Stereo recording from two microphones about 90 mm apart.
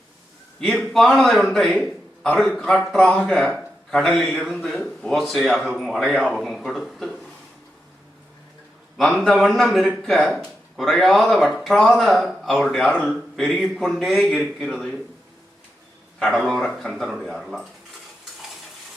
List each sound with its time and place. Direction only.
0.6 s a man's voice: 5° left (ahead or behind)
9.0 s speech: centre (ahead or behind)
16.3 s speech: 5° left (ahead or behind)